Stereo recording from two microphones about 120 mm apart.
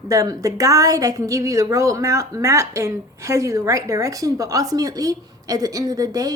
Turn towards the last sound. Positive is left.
turn(degrees=-30)  # may be behind; listen again after turning